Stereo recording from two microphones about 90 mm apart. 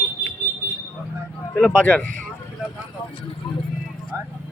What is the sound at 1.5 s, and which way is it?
Speech, 15° left (ahead or behind).